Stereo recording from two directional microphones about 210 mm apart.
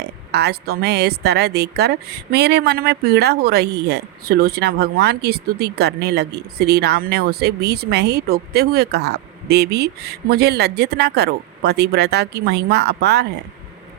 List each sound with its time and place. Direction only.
0.3 s a woman's voice: 50° right (ahead or behind)